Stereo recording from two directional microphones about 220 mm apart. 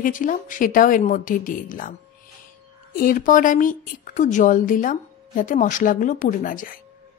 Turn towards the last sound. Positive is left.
turn(degrees=40)  # may be behind; listen again after turning